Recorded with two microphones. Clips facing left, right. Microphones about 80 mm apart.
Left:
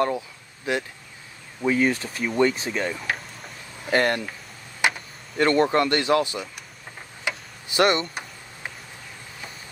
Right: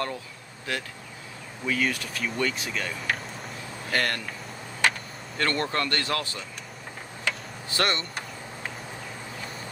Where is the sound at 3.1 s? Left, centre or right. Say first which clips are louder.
Left 1 dB; centre.